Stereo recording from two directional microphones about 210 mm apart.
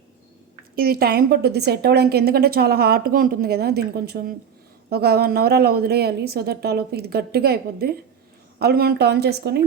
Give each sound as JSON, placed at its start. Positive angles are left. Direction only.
{"t": 0.8, "sound": "a woman's voice", "side_deg": -45}